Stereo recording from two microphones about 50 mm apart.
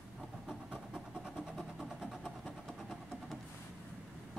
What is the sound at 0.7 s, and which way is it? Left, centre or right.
Vehicle, centre.